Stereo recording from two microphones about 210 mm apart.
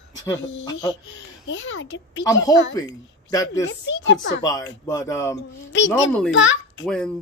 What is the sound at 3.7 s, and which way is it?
Speech, 60° left (ahead or behind).